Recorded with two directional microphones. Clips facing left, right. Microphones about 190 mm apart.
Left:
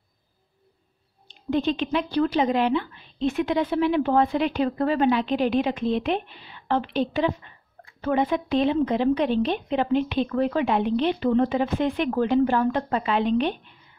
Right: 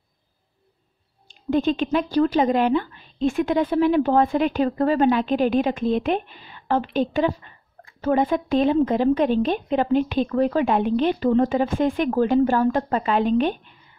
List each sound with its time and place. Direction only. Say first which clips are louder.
1.2 s speech: right 3 dB; 50° right (ahead or behind)